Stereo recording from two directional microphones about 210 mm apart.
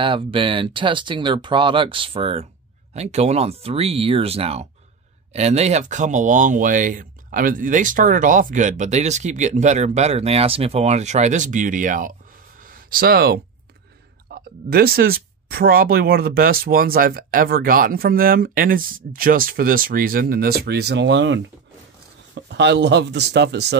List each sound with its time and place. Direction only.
0.0 s speech: 25° right (ahead or behind); by 12.2 s 40° right (ahead or behind)
12.6 s a sound: 45° right (ahead or behind)
14.3 s speech: 45° right (ahead or behind)